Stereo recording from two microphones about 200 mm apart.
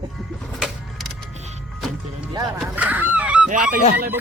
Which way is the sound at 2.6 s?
5° right (ahead or behind).